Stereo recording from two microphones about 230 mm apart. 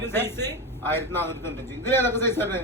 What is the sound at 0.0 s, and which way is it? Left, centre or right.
A man's voice, centre.